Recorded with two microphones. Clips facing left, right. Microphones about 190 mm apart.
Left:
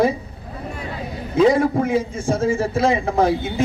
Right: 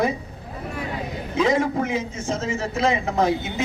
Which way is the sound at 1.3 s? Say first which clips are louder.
Left 5 dB; 30° left (ahead or behind).